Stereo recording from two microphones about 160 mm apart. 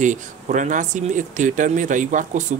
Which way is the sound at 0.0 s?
50° right (ahead or behind).